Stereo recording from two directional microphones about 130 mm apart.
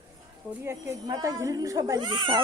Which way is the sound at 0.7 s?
25° right (ahead or behind).